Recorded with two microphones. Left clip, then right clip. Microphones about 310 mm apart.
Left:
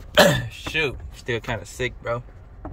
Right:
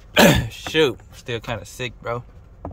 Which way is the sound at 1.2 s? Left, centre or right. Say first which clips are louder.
Left 1 dB; centre.